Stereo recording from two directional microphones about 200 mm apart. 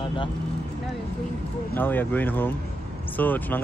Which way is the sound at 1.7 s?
10° left (ahead or behind).